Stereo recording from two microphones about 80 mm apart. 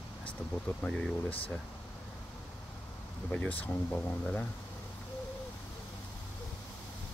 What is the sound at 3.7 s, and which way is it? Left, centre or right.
Speech, left.